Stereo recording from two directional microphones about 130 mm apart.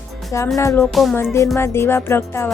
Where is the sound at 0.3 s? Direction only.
20° left (ahead or behind).